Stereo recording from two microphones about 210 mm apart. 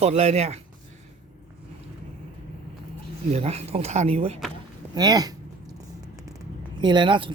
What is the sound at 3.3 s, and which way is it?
Speech, 30° right (ahead or behind).